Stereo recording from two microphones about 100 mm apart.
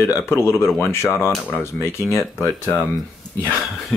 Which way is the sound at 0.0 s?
25° left (ahead or behind).